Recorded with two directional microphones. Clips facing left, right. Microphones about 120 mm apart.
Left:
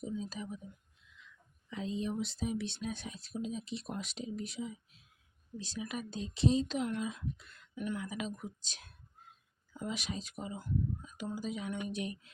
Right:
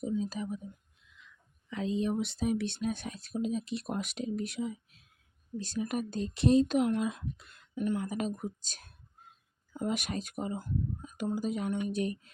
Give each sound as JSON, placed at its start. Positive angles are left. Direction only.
{"t": 0.0, "sound": "speech", "side_deg": -55}
{"t": 1.7, "sound": "speech", "side_deg": -70}